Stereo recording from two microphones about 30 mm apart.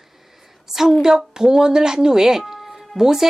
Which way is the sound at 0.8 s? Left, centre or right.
Centre.